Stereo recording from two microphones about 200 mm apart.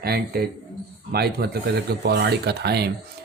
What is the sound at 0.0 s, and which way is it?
Speech, 50° right (ahead or behind).